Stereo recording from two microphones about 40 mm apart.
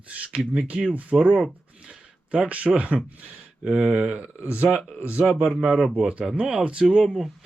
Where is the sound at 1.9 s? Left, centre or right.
Right.